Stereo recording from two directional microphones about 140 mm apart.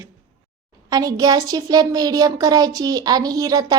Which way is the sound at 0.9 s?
25° right (ahead or behind).